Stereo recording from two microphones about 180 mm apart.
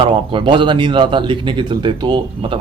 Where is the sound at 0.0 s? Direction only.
25° right (ahead or behind).